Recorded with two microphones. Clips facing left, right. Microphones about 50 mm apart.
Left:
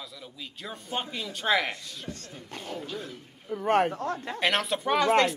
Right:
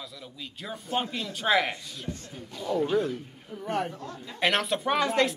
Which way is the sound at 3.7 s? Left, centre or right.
Left.